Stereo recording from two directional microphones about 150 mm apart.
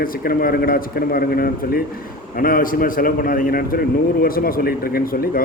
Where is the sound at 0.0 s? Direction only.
75° left (ahead or behind).